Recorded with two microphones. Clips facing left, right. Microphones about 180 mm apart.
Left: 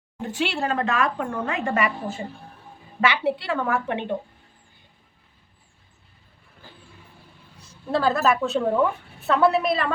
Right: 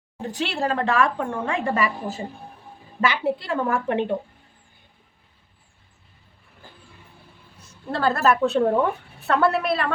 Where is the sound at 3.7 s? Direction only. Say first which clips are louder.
Right 5 dB; 45° right (ahead or behind).